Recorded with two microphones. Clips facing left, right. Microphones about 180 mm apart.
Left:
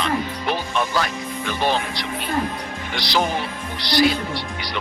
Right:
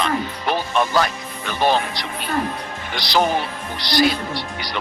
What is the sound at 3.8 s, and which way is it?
Speech, 40° right (ahead or behind).